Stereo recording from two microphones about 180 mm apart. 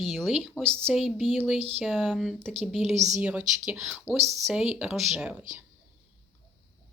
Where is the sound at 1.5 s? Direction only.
35° right (ahead or behind).